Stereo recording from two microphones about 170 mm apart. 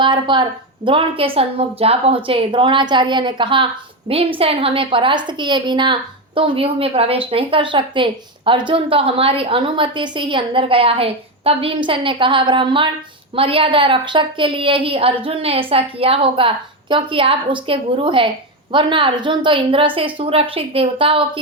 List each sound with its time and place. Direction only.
0.0 s a woman's voice: 30° right (ahead or behind)